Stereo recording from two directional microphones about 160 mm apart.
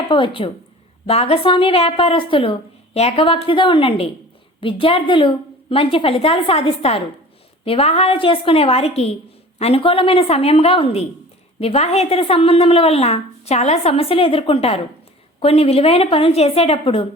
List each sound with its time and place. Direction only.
0.1 s a woman's voice: 30° left (ahead or behind)